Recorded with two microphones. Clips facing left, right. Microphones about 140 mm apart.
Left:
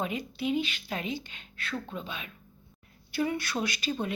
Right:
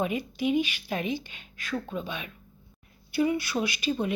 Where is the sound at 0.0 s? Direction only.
15° right (ahead or behind).